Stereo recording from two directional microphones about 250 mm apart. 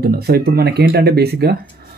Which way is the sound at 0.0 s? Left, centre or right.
Right.